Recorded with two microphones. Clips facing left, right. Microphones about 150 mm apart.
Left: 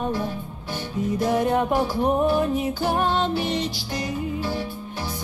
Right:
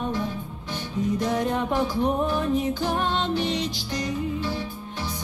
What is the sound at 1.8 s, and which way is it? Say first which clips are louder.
Music: left 2 dB; 40° left (ahead or behind).